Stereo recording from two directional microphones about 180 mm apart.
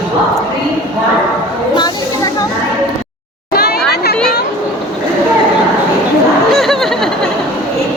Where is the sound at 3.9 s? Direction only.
60° left (ahead or behind).